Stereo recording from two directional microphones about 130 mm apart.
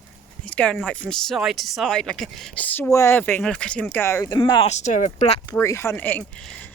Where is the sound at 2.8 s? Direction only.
25° left (ahead or behind).